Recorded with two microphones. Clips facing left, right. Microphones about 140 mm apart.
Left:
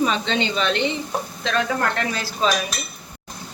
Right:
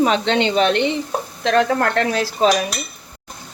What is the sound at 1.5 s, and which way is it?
Dishes, 60° right (ahead or behind).